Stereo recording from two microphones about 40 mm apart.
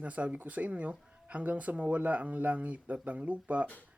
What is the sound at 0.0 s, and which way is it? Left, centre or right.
Speech, right.